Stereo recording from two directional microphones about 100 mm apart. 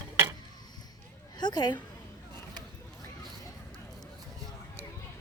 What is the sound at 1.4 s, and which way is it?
Speech, 45° left (ahead or behind).